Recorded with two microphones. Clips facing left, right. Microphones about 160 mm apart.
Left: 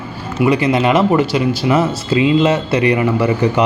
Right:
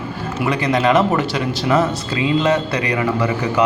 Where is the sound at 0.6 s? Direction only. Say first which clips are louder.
Left 2 dB; 20° left (ahead or behind).